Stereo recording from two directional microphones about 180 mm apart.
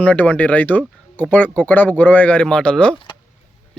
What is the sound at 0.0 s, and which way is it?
Speech, 10° left (ahead or behind).